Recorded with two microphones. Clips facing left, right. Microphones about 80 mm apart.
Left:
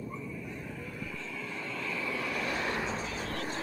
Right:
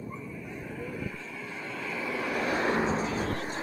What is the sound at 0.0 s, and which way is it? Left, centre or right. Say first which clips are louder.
Vehicle: even; right.